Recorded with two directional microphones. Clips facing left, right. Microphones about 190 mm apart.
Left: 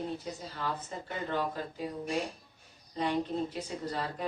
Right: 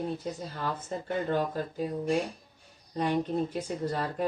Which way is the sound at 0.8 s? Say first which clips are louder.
Right 6 dB; 45° right (ahead or behind).